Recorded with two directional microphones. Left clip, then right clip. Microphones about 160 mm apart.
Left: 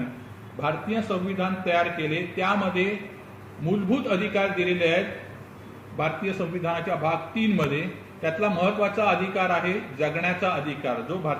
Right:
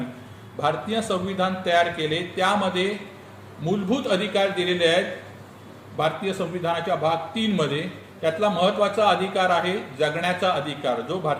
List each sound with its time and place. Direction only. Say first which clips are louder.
0.6 s a man's voice: right 3 dB; 20° right (ahead or behind)